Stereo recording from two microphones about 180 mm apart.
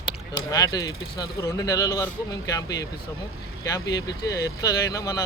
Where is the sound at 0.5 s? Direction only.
20° left (ahead or behind).